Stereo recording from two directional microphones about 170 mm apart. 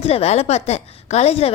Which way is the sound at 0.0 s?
35° left (ahead or behind).